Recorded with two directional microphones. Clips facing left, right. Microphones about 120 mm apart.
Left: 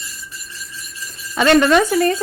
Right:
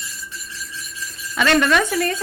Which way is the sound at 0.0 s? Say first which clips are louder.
Right 1 dB; centre (ahead or behind).